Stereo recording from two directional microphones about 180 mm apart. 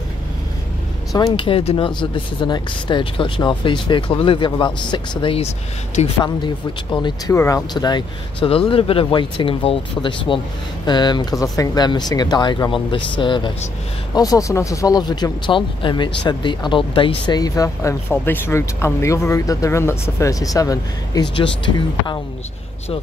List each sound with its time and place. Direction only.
1.1 s speech: 25° left (ahead or behind)